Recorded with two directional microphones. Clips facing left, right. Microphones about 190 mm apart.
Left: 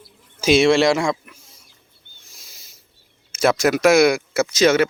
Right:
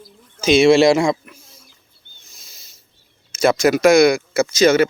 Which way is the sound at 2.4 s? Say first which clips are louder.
Left 1 dB; 15° left (ahead or behind).